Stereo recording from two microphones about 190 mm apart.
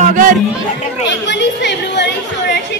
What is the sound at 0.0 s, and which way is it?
Chatter, 40° right (ahead or behind).